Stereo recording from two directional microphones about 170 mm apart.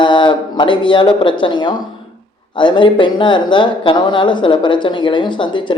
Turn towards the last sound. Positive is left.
turn(degrees=30)  # may be behind; listen again after turning